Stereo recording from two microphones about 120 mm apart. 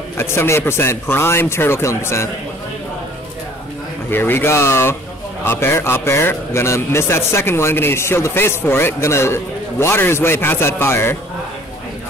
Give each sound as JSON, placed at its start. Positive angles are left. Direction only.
{"t": 0.2, "sound": "a man's voice", "side_deg": 20}
{"t": 4.1, "sound": "a man's voice", "side_deg": 15}